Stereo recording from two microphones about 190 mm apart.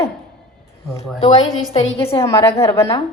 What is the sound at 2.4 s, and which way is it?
Speech, 30° left (ahead or behind).